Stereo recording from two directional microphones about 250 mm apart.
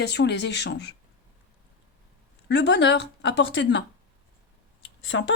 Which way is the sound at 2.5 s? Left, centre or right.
Left.